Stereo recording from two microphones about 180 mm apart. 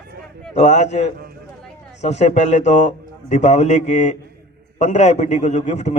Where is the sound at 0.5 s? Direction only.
40° left (ahead or behind).